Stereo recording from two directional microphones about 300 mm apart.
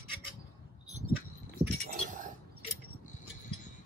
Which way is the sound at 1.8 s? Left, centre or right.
Right.